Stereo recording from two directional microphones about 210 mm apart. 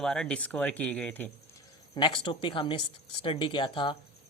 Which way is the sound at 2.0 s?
20° left (ahead or behind).